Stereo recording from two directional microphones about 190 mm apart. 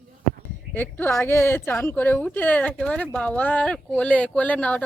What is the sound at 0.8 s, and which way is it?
Speech, 10° left (ahead or behind).